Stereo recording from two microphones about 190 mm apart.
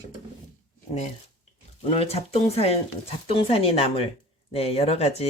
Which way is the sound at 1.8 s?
35° left (ahead or behind).